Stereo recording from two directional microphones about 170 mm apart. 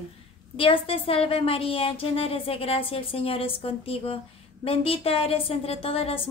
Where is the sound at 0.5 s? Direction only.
30° left (ahead or behind).